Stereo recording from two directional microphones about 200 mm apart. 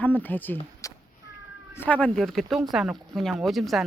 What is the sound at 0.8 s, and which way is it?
Cat, 15° left (ahead or behind).